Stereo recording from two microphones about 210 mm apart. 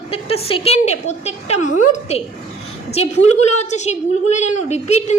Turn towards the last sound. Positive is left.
turn(degrees=30)  # may be behind; listen again after turning